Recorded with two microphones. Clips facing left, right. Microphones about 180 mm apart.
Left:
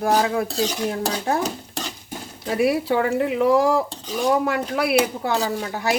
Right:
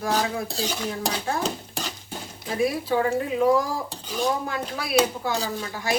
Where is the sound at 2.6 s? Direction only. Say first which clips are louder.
Left 3 dB; 70° left (ahead or behind).